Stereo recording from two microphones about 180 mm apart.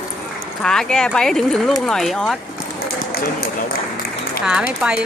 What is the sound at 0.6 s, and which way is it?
Speech, 5° left (ahead or behind).